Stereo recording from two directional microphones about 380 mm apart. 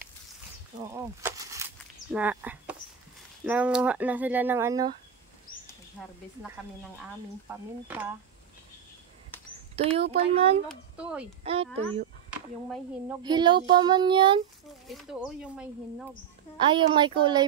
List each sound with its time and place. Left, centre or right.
0.8 s speech: centre
5.9 s speech: centre
9.8 s speech: centre
10.7 s speech: centre
11.4 s speech: centre
12.3 s speech: centre
14.9 s speech: centre